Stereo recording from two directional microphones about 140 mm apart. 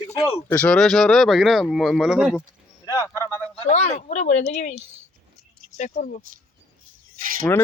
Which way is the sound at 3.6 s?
55° left (ahead or behind).